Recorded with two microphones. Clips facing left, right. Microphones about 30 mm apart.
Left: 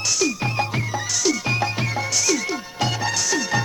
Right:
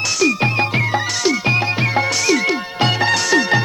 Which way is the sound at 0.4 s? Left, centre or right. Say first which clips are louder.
Right 7 dB; right.